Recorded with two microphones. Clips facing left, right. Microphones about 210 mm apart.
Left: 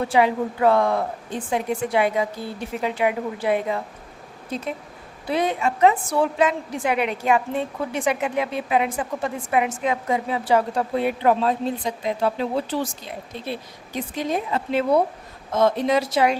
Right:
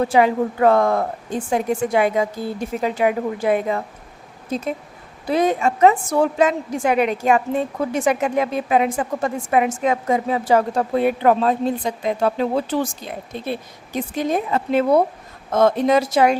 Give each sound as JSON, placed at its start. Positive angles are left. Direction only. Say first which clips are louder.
{"t": 0.1, "sound": "a woman's voice", "louder": "right 3 dB", "side_deg": -45}